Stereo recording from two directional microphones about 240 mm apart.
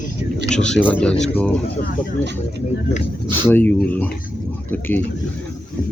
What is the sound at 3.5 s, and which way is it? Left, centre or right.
Speech, centre.